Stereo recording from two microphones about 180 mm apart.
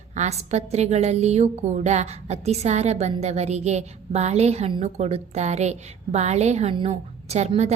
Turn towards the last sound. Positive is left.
turn(degrees=-40)  # may be behind; listen again after turning